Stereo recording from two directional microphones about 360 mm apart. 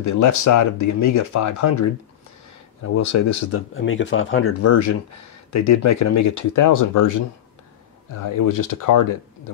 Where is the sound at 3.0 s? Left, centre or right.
Left.